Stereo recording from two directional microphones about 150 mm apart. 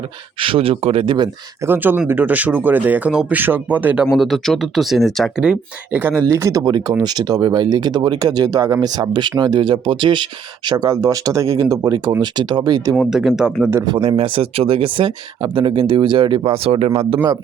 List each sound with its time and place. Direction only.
0.3 s speech: 35° right (ahead or behind)
1.6 s speech: 15° right (ahead or behind)
4.2 s speech: centre (ahead or behind); by 13.0 s 25° right (ahead or behind)
13.0 s speech: 5° right (ahead or behind)
13.8 s speech: 30° right (ahead or behind)